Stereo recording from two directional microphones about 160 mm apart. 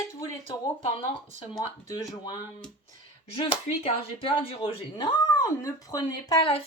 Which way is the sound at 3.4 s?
35° left (ahead or behind).